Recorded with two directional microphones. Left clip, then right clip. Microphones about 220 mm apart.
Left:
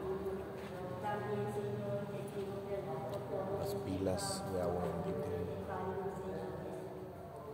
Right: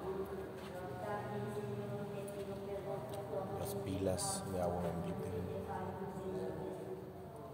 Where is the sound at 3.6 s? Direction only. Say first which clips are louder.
Left 1 dB; 15° right (ahead or behind).